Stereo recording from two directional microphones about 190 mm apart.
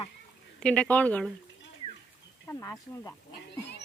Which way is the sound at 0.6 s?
5° left (ahead or behind).